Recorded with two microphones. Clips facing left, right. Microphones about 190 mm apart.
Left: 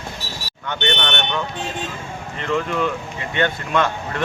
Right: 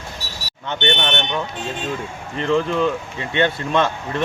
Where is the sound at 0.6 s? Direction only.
20° right (ahead or behind).